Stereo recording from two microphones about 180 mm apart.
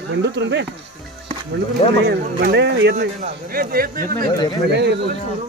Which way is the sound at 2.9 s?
50° right (ahead or behind).